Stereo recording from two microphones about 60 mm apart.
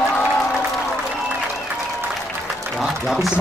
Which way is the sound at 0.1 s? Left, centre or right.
Left.